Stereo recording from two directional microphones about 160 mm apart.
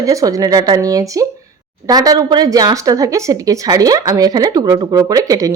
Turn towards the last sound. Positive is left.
turn(degrees=-20)  # may be behind; listen again after turning